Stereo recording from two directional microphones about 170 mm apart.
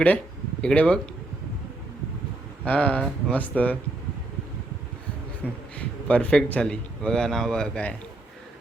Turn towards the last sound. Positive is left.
turn(degrees=5)  # may be behind; listen again after turning